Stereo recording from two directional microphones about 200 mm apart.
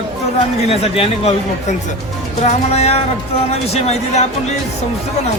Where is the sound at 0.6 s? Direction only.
30° left (ahead or behind).